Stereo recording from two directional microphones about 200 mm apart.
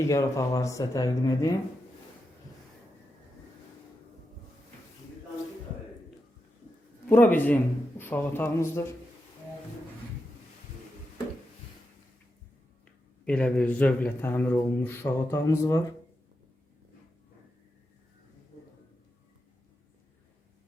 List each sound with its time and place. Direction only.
0.1 s speech: 15° left (ahead or behind)
7.1 s speech: 10° left (ahead or behind)
13.2 s speech: 5° left (ahead or behind)